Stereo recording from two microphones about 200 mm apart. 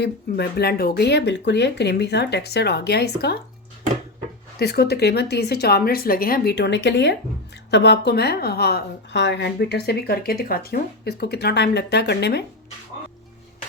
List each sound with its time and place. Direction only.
0.0 s speech: 55° left (ahead or behind)
4.6 s a woman's voice: 55° left (ahead or behind)